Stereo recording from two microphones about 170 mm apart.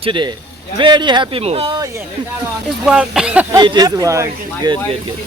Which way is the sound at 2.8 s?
5° right (ahead or behind).